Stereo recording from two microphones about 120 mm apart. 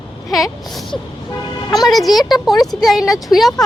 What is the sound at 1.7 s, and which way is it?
Speech, 30° left (ahead or behind).